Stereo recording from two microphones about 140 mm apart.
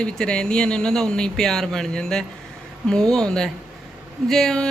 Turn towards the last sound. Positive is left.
turn(degrees=5)  # may be behind; listen again after turning